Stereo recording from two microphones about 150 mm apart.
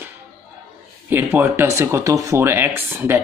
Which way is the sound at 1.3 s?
20° right (ahead or behind).